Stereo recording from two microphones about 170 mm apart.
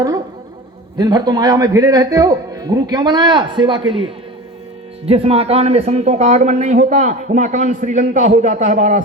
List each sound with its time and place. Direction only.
0.9 s a man's voice: 25° right (ahead or behind); by 9.0 s 45° right (ahead or behind)